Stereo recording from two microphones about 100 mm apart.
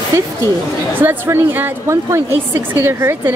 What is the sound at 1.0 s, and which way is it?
A woman's voice, 20° right (ahead or behind).